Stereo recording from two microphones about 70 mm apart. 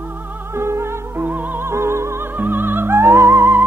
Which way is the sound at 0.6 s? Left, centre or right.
Right.